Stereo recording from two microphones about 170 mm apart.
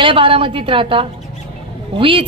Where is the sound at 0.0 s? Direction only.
30° right (ahead or behind).